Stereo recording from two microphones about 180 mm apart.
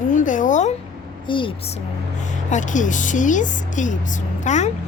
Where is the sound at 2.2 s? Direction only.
45° left (ahead or behind).